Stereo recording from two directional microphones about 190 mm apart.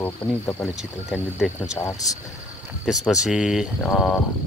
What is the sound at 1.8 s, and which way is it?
Speech, 10° left (ahead or behind).